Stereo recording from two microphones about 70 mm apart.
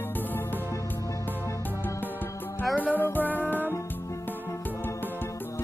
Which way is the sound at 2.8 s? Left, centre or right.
Left.